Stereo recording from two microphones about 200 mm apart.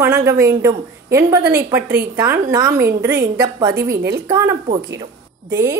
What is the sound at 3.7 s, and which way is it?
Speech, 50° right (ahead or behind).